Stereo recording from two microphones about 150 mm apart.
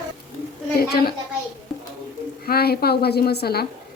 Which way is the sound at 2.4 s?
90° left.